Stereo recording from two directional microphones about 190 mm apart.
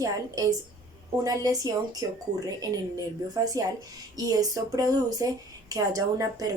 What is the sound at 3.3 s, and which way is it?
A woman's voice, 20° right (ahead or behind).